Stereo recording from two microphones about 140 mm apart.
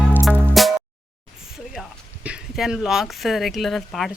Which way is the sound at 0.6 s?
Centre (ahead or behind).